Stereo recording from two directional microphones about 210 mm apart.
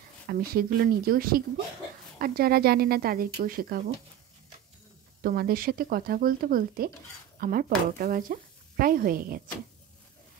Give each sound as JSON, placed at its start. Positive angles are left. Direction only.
{"t": 0.3, "sound": "speech", "side_deg": -45}
{"t": 5.2, "sound": "speech", "side_deg": -45}